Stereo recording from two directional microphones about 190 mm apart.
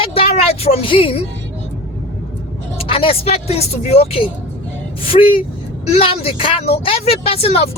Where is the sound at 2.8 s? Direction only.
30° left (ahead or behind).